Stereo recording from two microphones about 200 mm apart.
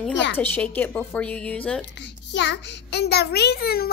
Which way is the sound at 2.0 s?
60° left (ahead or behind).